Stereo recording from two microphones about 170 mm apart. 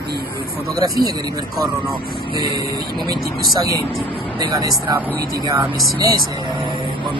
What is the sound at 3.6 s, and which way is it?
Speech, 20° right (ahead or behind).